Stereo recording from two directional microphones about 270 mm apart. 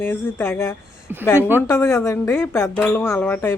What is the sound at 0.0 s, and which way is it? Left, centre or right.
Speech, centre.